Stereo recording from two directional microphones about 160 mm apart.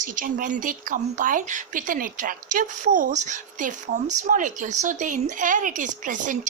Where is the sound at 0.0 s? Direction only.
55° right (ahead or behind).